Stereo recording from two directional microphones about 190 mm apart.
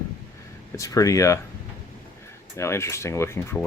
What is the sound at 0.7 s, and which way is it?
Speech, 15° left (ahead or behind).